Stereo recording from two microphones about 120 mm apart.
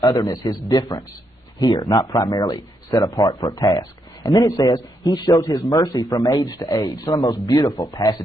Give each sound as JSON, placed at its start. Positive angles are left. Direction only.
{"t": 0.0, "sound": "speech", "side_deg": 30}